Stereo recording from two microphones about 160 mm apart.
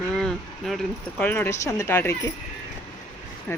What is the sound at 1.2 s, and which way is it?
Speech, 15° left (ahead or behind).